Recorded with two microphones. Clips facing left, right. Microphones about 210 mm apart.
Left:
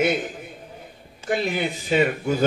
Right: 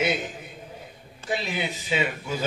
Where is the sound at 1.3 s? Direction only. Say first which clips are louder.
Left 5 dB; 55° left (ahead or behind).